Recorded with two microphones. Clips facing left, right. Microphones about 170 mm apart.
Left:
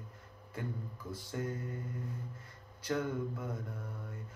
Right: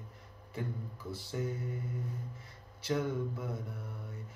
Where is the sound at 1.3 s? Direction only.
5° right (ahead or behind).